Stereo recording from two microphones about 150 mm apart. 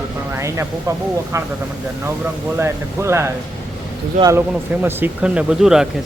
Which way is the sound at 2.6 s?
15° right (ahead or behind).